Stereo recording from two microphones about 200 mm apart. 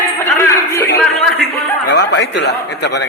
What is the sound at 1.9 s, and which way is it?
Speech, 60° left (ahead or behind).